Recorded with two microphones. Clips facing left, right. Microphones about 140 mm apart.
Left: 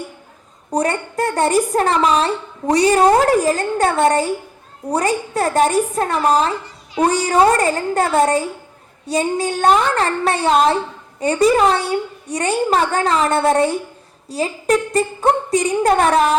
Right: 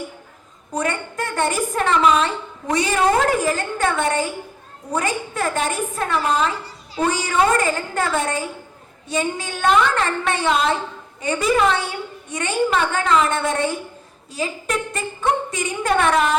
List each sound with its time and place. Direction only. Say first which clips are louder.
0.7 s a woman's voice: left 5 dB; 35° left (ahead or behind)